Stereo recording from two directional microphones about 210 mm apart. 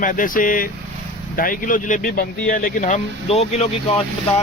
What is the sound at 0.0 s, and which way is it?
Speech, 40° left (ahead or behind).